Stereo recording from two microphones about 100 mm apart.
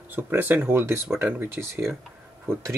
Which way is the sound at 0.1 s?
20° right (ahead or behind).